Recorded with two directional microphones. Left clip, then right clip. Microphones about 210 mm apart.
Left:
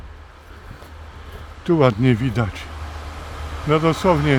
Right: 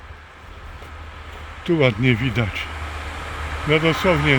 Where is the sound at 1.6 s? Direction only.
30° left (ahead or behind).